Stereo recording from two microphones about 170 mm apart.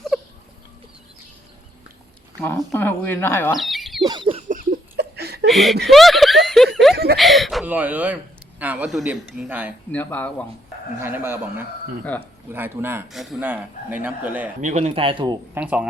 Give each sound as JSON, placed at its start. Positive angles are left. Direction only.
{"t": 2.4, "sound": "speech", "side_deg": 10}
{"t": 3.6, "sound": "a sound", "side_deg": 0}
{"t": 4.0, "sound": "a sound", "side_deg": -30}
{"t": 4.4, "sound": "a sound", "side_deg": -55}
{"t": 5.5, "sound": "speech", "side_deg": 0}
{"t": 6.9, "sound": "speech", "side_deg": -70}
{"t": 7.2, "sound": "a man's voice", "side_deg": 0}
{"t": 9.9, "sound": "speech", "side_deg": 10}
{"t": 11.0, "sound": "a man's voice", "side_deg": -15}
{"t": 13.1, "sound": "a man's voice", "side_deg": 0}
{"t": 14.6, "sound": "speech", "side_deg": -45}
{"t": 15.5, "sound": "a man's voice", "side_deg": -5}